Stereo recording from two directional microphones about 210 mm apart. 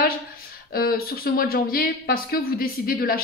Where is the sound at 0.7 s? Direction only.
45° left (ahead or behind).